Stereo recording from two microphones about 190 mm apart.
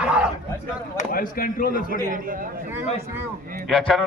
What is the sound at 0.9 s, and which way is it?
Speech, 50° left (ahead or behind).